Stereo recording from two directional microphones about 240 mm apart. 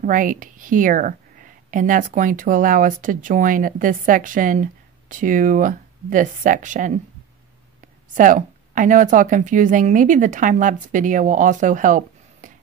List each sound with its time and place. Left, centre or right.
0.0 s a woman's voice: right
8.1 s a woman's voice: right